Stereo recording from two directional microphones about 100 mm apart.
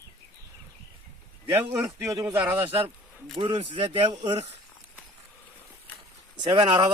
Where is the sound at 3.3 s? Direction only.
55° right (ahead or behind).